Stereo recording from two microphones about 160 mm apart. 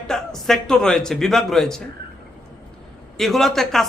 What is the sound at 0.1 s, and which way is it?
A man's voice, 5° left (ahead or behind).